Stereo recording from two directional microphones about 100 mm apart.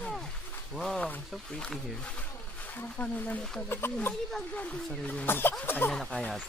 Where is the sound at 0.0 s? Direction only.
5° left (ahead or behind).